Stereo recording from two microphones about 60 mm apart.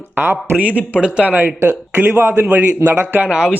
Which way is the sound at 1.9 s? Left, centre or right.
Right.